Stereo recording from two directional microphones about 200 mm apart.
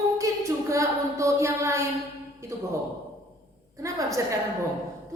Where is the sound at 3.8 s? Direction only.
15° right (ahead or behind).